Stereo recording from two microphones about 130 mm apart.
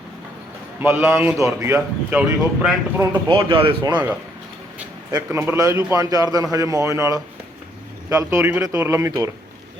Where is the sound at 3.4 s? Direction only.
40° right (ahead or behind).